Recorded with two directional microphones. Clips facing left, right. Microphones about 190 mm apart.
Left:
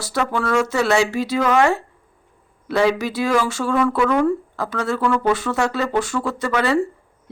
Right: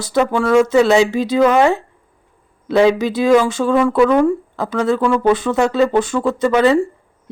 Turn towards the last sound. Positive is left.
turn(degrees=-20)  # may be behind; listen again after turning